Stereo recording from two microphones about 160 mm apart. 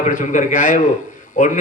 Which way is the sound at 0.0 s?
50° left (ahead or behind).